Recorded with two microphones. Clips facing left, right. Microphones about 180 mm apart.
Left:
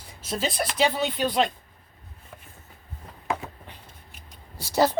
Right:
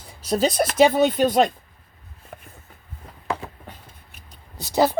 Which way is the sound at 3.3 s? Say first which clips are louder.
Right 1 dB; 45° right (ahead or behind).